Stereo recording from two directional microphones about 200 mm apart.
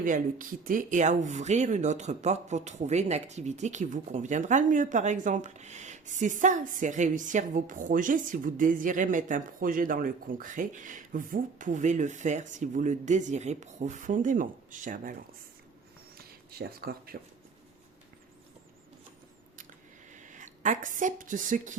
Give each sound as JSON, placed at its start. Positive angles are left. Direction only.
{"t": 0.0, "sound": "speech", "side_deg": -40}
{"t": 16.1, "sound": "speech", "side_deg": -50}
{"t": 20.1, "sound": "a woman's voice", "side_deg": -40}